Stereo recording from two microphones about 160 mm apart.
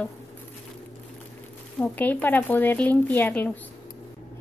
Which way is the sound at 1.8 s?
10° left (ahead or behind).